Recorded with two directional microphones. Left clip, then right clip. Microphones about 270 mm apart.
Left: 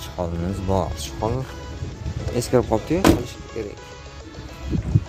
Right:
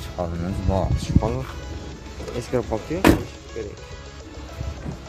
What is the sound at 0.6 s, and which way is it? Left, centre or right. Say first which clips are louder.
Speech: left 2 dB; centre.